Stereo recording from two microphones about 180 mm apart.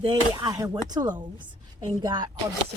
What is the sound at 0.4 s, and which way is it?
Speech, 20° right (ahead or behind).